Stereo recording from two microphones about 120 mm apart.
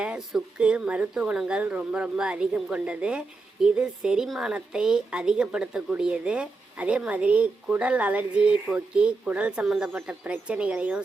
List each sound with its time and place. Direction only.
0.0 s speech: 5° right (ahead or behind)